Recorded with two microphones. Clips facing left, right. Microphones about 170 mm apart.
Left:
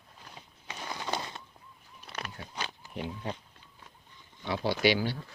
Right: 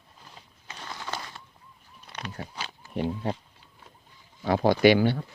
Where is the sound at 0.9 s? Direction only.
20° left (ahead or behind).